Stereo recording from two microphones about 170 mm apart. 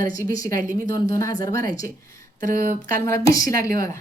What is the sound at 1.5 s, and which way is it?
A woman's voice, 55° right (ahead or behind).